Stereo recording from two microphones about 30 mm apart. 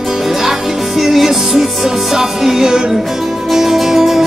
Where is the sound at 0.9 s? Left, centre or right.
Centre.